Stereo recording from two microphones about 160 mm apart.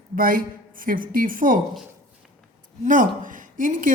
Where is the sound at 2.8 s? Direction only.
55° right (ahead or behind).